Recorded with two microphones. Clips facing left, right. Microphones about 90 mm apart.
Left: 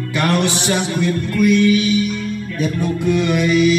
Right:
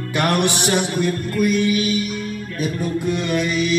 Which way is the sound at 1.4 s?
45° right (ahead or behind).